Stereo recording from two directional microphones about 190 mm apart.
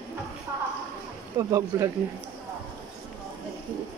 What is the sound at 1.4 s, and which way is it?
Speech, 15° right (ahead or behind).